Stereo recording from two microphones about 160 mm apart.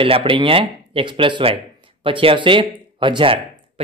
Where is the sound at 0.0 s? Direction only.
35° right (ahead or behind).